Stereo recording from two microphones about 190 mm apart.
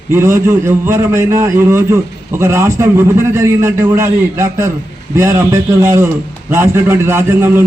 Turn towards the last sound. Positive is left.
turn(degrees=-15)  # may be behind; listen again after turning